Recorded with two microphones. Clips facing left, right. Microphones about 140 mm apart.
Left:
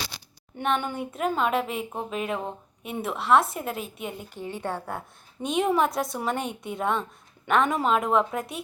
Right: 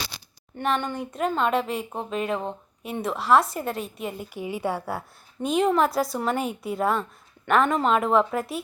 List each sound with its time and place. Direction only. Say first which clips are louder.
0.6 s a woman's voice: right 1 dB; 5° left (ahead or behind)
4.4 s a woman's voice: right 4 dB; 10° right (ahead or behind)